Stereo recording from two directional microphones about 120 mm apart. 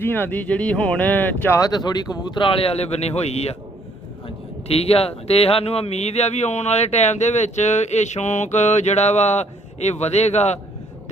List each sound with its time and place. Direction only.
0.0 s speech: 15° left (ahead or behind)
1.5 s a man's voice: 35° left (ahead or behind); by 3.5 s 60° left (ahead or behind)
4.7 s speech: 55° left (ahead or behind)